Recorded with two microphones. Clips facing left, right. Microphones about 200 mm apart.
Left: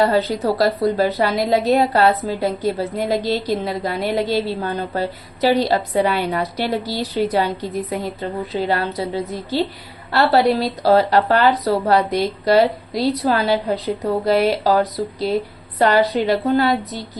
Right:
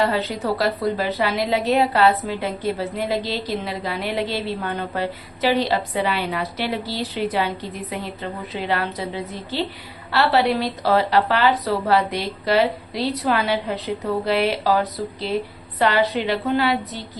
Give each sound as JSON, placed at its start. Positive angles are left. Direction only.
{"t": 0.0, "sound": "a woman's voice", "side_deg": 40}